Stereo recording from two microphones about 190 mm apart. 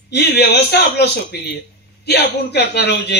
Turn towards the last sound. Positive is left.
turn(degrees=60)  # may be behind; listen again after turning